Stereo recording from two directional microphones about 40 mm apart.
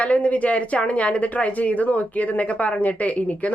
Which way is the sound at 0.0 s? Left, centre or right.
Left.